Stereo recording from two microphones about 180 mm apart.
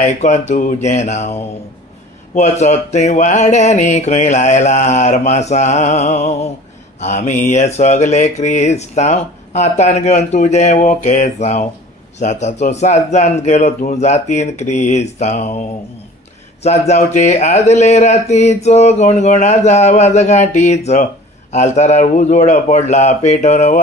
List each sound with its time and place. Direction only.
0.0 s speech: 40° left (ahead or behind)
16.6 s speech: 40° left (ahead or behind)